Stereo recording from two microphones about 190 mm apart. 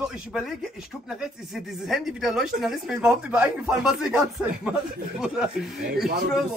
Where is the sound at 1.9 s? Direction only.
Centre (ahead or behind).